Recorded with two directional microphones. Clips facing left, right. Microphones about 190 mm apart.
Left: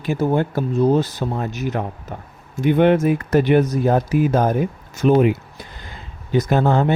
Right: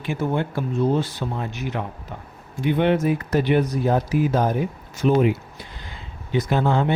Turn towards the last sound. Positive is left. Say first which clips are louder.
# left 3 dB
turn(degrees=45)  # may be behind; listen again after turning